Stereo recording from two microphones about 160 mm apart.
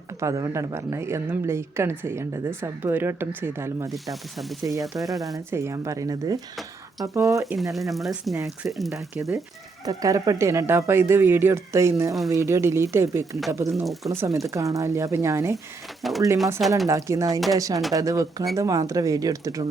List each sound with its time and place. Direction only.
0.2 s a woman's voice: 20° right (ahead or behind)
3.9 s speech: centre (ahead or behind)
5.5 s speech: 15° right (ahead or behind)
7.5 s speech: centre (ahead or behind)
8.9 s a woman's voice: 20° right (ahead or behind)
16.0 s speech: centre (ahead or behind)
16.8 s speech: 20° right (ahead or behind)